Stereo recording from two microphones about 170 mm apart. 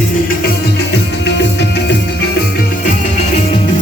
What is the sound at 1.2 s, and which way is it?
Music, 80° left.